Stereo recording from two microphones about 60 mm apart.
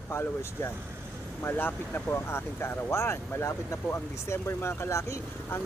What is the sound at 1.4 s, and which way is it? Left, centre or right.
Speech, left.